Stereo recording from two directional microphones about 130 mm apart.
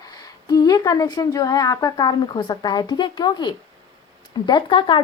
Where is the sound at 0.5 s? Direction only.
30° left (ahead or behind).